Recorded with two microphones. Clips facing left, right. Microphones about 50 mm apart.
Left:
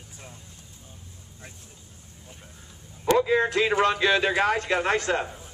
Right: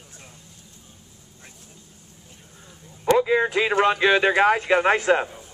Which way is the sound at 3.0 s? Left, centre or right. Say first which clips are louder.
Right 2 dB; centre.